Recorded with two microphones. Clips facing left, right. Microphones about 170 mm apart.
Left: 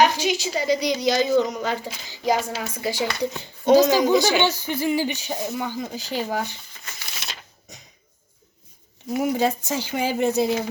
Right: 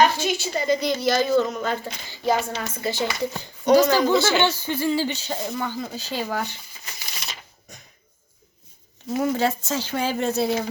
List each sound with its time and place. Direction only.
0.0 s speech: 15° left (ahead or behind)
7.1 s a sound: centre (ahead or behind)
9.1 s speech: 15° left (ahead or behind)